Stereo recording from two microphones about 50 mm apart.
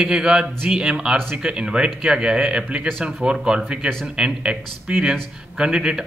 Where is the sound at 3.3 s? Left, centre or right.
Centre.